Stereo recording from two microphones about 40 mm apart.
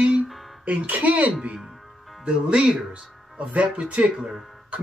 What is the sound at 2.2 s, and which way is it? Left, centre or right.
Speech, right.